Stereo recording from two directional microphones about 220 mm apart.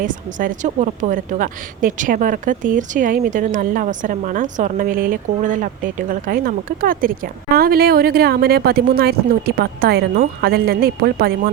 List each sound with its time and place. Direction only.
0.0 s a woman's voice: 35° right (ahead or behind)